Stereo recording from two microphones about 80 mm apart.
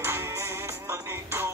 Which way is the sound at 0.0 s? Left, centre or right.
Right.